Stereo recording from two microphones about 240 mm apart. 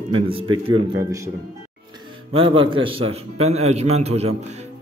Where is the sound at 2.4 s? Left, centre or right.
Right.